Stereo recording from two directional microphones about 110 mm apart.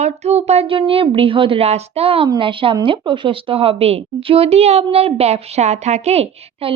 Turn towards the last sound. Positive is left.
turn(degrees=-70)  # may be behind; listen again after turning